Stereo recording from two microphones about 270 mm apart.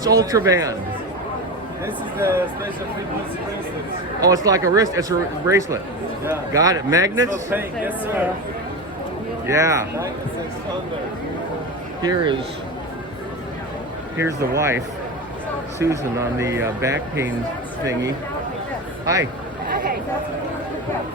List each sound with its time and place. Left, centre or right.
0.0 s a man's voice: centre
1.8 s a man's voice: centre
4.2 s a man's voice: centre
9.5 s a man's voice: centre
12.0 s a man's voice: centre
14.2 s a man's voice: centre
15.8 s a man's voice: centre
19.0 s speech: centre